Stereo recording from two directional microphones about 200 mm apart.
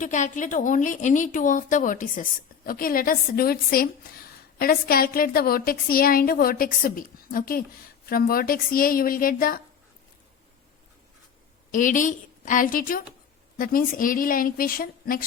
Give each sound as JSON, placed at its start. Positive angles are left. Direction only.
{"t": 0.0, "sound": "a woman's voice", "side_deg": 40}
{"t": 11.7, "sound": "a woman's voice", "side_deg": 40}